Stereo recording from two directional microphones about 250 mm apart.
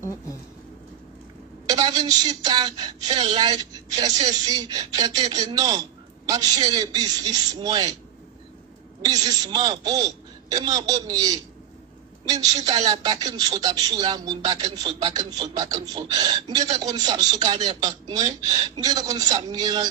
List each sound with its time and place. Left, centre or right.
1.7 s speech: centre
9.0 s speech: centre
12.3 s speech: centre